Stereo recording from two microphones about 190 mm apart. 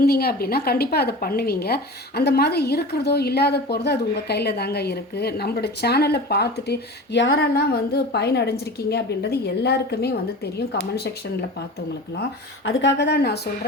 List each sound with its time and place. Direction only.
0.0 s a woman's voice: 55° left (ahead or behind)
12.6 s a woman's voice: 70° left (ahead or behind)